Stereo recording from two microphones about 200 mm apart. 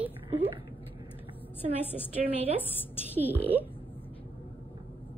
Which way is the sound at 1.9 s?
35° right (ahead or behind).